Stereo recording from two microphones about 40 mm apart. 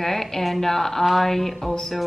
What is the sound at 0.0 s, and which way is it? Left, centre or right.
A woman's voice, centre.